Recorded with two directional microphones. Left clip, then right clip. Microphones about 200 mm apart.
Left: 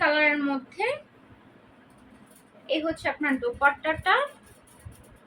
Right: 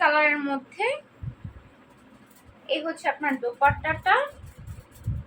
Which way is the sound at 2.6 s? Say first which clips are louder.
Right 1 dB; 10° left (ahead or behind).